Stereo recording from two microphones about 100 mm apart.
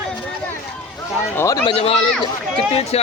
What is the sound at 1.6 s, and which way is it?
Speech, 75° left (ahead or behind).